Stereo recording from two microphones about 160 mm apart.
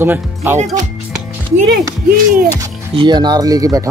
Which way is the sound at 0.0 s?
15° right (ahead or behind).